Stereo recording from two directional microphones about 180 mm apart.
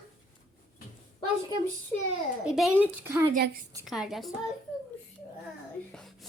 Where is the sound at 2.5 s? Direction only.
5° right (ahead or behind).